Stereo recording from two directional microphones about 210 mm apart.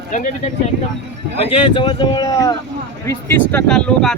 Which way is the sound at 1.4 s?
25° left (ahead or behind).